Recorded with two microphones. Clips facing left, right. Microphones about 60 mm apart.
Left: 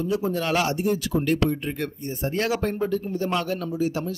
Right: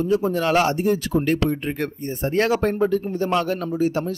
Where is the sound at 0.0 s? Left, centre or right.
Right.